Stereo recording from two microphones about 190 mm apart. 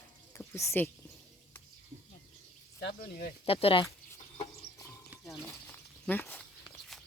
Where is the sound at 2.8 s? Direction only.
55° left (ahead or behind).